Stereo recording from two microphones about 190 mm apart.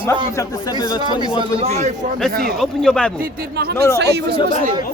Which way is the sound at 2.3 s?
50° right (ahead or behind).